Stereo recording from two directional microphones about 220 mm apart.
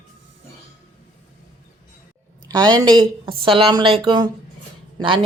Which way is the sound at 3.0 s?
25° right (ahead or behind).